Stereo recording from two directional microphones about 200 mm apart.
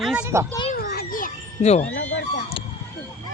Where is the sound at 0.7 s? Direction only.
50° left (ahead or behind).